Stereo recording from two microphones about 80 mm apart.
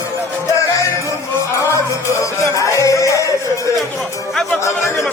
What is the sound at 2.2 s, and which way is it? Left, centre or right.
Music, left.